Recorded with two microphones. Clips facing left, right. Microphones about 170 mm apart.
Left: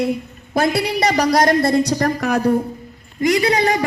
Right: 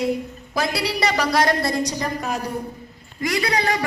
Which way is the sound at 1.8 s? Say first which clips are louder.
Left 7 dB; 65° left (ahead or behind).